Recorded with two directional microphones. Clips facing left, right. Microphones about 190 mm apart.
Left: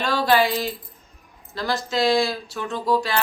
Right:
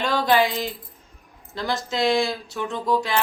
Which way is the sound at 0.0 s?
20° right (ahead or behind).